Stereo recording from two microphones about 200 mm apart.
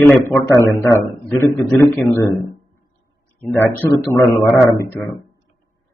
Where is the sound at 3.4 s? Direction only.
10° left (ahead or behind).